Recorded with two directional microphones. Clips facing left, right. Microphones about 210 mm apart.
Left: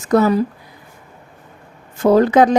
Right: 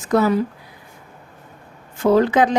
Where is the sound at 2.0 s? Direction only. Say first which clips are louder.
Left 3 dB; 40° left (ahead or behind).